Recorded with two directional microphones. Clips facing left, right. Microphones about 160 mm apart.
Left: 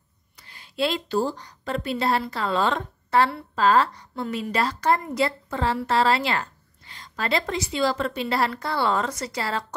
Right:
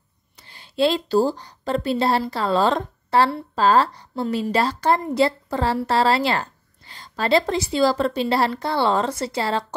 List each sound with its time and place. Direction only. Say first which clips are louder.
0.4 s a woman's voice: right 6 dB; 30° right (ahead or behind)